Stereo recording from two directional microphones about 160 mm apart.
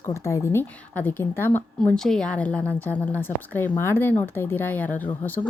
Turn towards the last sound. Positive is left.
turn(degrees=10)  # may be behind; listen again after turning